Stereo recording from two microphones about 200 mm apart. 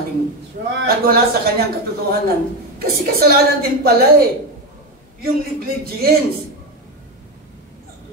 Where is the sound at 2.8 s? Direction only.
50° right (ahead or behind).